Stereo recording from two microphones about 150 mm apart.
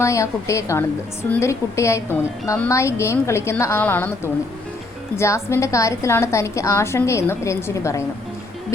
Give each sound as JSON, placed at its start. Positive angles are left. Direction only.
{"t": 0.0, "sound": "a woman's voice", "side_deg": 20}